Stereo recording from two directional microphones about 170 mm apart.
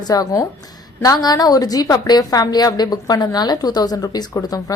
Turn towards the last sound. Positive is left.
turn(degrees=25)  # may be behind; listen again after turning